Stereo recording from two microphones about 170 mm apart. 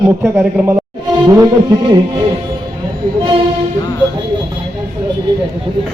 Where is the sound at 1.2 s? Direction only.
20° right (ahead or behind).